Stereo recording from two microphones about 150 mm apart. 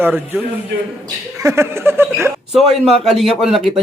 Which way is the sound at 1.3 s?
20° right (ahead or behind).